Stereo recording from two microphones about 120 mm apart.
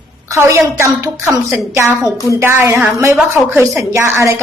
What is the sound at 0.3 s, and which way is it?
A woman's voice, 20° right (ahead or behind).